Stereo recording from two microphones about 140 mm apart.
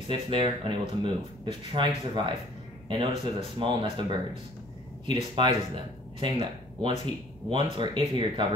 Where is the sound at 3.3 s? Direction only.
40° right (ahead or behind).